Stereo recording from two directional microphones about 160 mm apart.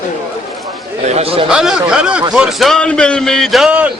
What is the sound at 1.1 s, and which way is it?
Chatter, 40° right (ahead or behind).